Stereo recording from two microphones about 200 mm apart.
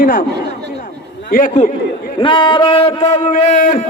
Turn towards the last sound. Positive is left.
turn(degrees=40)  # may be behind; listen again after turning